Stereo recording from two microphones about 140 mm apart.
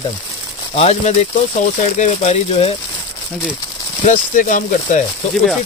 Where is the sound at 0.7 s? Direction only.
50° left (ahead or behind).